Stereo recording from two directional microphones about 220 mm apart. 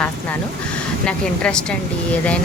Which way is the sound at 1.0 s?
5° left (ahead or behind).